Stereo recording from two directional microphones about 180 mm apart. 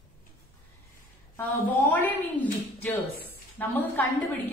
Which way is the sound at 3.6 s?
10° left (ahead or behind).